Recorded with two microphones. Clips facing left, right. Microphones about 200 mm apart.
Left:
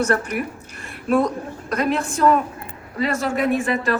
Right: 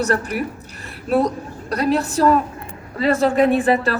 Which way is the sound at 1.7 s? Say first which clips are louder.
Right 3 dB; 35° right (ahead or behind).